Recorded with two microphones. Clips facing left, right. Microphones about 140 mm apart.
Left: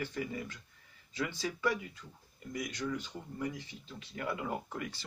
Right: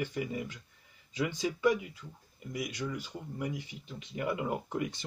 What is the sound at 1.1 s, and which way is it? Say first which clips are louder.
Speech: right 4 dB; 15° right (ahead or behind).